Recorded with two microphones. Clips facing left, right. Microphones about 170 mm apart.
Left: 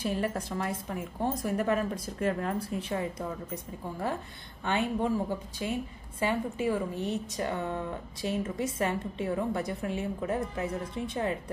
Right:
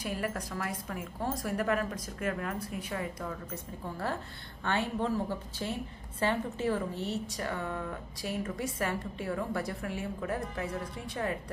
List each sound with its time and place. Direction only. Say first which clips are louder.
0.0 s a woman's voice: left 4 dB; 25° left (ahead or behind)
4.6 s a woman's voice: left 2 dB; 15° left (ahead or behind)